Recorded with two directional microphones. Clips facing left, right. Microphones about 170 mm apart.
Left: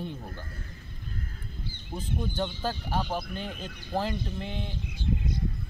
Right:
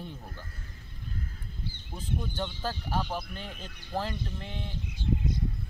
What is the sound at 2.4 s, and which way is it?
Speech, 20° left (ahead or behind).